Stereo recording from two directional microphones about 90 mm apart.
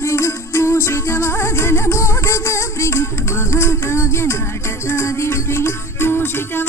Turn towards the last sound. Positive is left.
turn(degrees=25)  # may be behind; listen again after turning